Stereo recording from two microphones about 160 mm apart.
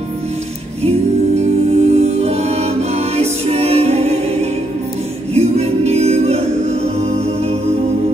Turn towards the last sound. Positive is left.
turn(degrees=-40)  # may be behind; listen again after turning